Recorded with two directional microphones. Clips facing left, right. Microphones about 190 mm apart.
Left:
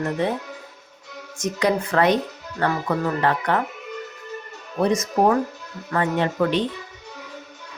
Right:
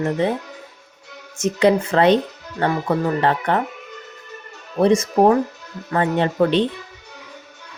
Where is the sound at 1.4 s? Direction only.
25° right (ahead or behind).